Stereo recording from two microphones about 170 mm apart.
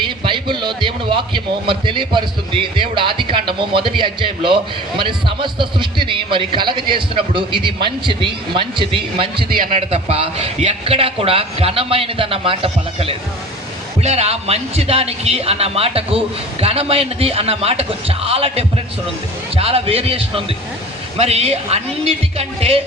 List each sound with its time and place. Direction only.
0.0 s a man's voice: 30° right (ahead or behind)
9.4 s a man's voice: 65° right (ahead or behind)
9.6 s a man's voice: 40° right (ahead or behind)